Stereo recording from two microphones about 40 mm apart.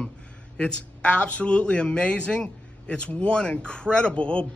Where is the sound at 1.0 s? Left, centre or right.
Left.